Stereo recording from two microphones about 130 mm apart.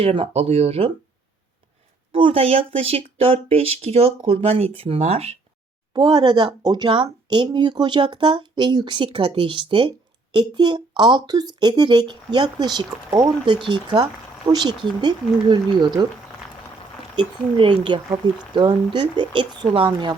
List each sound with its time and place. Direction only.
0.0 s speech: 45° right (ahead or behind)
2.1 s speech: 45° right (ahead or behind)
5.9 s speech: 35° right (ahead or behind)
17.2 s speech: 40° right (ahead or behind)